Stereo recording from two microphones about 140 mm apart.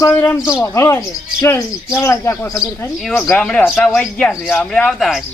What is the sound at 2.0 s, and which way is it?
Speech, 20° left (ahead or behind).